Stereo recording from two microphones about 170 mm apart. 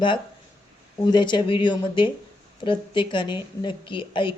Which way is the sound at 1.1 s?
25° left (ahead or behind).